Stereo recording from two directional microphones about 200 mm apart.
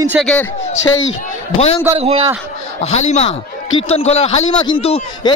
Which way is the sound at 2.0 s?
30° right (ahead or behind).